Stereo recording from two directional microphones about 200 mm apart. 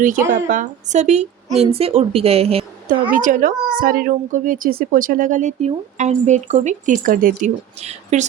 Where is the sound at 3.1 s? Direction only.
40° right (ahead or behind).